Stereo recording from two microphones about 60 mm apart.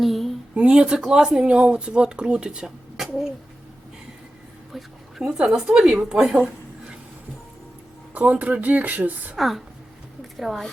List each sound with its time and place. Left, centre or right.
0.0 s a sound: centre
0.5 s speech: centre
4.7 s speech: centre
8.1 s speech: right
9.4 s a woman's voice: centre